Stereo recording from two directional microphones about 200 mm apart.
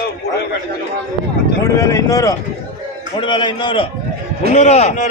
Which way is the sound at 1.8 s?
15° left (ahead or behind).